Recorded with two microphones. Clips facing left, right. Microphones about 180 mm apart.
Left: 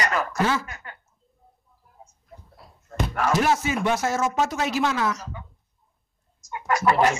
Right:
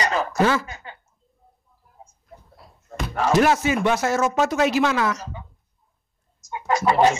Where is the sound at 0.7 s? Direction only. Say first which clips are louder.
Right 3 dB; 25° right (ahead or behind).